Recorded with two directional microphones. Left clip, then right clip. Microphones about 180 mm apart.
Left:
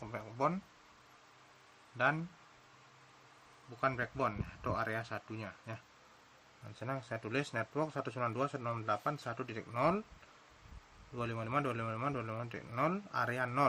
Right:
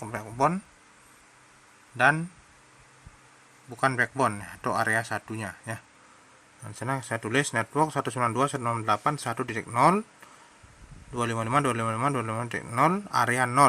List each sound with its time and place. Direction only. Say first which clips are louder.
0.0 s speech: right 10 dB; 35° right (ahead or behind)
2.0 s speech: right 11 dB; 35° right (ahead or behind)
3.8 s speech: right 11 dB; 40° right (ahead or behind)
11.1 s speech: right 11 dB; 40° right (ahead or behind)